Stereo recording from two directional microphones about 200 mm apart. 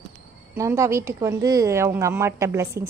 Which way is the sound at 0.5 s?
15° right (ahead or behind).